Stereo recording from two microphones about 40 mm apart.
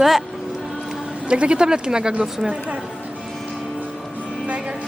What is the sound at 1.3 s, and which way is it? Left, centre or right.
Speech, right.